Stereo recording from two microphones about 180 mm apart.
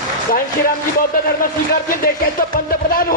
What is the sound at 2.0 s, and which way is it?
A man's voice, 55° left (ahead or behind).